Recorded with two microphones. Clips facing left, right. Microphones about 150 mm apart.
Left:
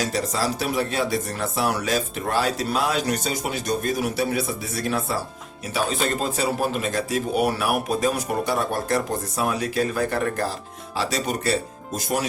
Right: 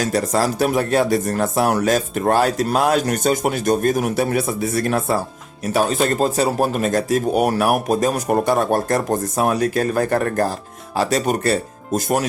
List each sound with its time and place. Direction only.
0.0 s speech: 50° right (ahead or behind)